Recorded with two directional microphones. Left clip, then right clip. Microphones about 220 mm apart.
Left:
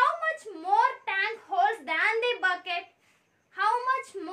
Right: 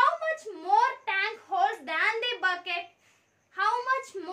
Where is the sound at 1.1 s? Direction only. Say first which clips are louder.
Even; 10° left (ahead or behind).